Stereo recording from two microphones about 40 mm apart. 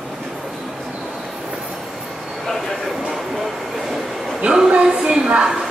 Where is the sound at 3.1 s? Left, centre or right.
Centre.